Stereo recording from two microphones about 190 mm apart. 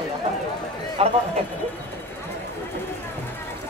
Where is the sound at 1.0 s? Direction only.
30° right (ahead or behind).